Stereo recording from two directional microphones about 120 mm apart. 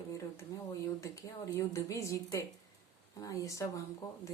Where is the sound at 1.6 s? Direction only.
25° left (ahead or behind).